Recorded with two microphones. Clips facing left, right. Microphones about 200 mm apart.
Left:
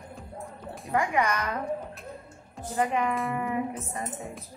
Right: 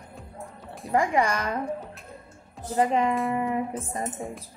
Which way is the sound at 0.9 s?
30° right (ahead or behind).